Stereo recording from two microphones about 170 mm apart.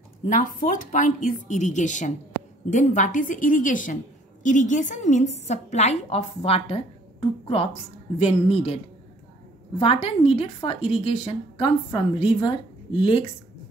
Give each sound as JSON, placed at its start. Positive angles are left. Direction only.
{"t": 0.3, "sound": "a woman's voice", "side_deg": 50}